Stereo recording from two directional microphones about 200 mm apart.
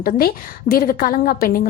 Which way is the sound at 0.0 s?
50° left (ahead or behind).